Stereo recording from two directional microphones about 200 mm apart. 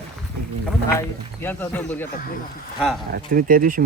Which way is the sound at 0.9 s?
10° left (ahead or behind).